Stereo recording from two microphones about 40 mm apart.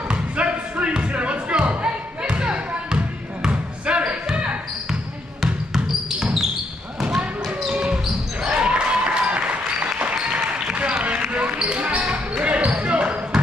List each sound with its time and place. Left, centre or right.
0.1 s music: right
3.4 s basketball bounce: right
7.7 s basketball bounce: right
8.5 s applause: right
11.4 s basketball bounce: right